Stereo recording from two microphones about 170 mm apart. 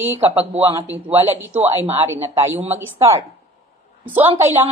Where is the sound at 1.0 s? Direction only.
10° right (ahead or behind).